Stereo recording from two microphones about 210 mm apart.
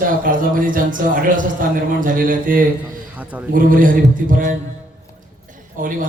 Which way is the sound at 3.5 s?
40° right (ahead or behind).